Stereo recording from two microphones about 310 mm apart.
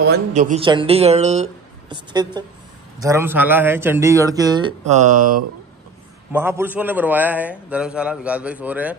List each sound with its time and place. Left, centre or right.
0.0 s speech: right
6.3 s a man's voice: centre